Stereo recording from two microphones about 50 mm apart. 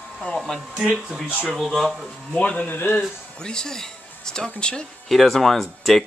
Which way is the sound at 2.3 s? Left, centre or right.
Left.